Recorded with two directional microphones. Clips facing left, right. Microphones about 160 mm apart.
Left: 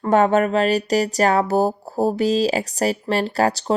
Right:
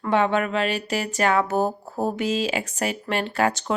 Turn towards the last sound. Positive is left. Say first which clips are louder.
# left 4 dB
turn(degrees=35)  # may be behind; listen again after turning